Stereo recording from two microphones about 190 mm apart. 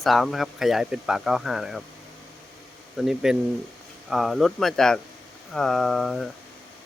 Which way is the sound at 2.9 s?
Centre (ahead or behind).